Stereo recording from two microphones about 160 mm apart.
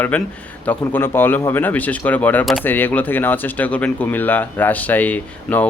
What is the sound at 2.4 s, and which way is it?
Speech, centre (ahead or behind).